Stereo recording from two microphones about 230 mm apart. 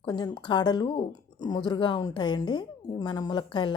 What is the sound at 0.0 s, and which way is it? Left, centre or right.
A woman's voice, centre.